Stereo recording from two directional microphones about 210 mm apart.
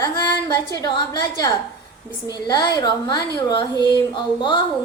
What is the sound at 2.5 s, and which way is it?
A woman's voice, 20° left (ahead or behind).